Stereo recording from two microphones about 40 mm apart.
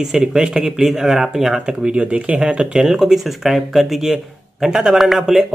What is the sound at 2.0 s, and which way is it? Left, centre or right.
Speech, right.